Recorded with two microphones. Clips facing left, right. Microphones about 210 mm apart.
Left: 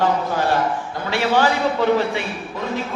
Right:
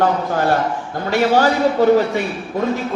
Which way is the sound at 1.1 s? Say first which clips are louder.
Right 4 dB; 45° right (ahead or behind).